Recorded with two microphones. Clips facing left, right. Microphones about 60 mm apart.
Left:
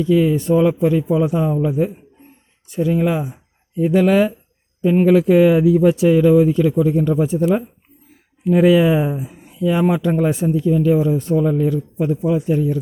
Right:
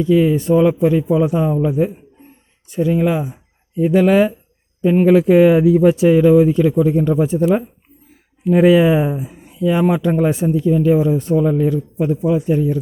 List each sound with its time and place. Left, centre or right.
0.0 s a man's voice: centre
2.6 s a man's voice: centre
9.4 s a sound: centre
9.9 s a man's voice: centre
10.5 s a man's voice: right; by 12.8 s centre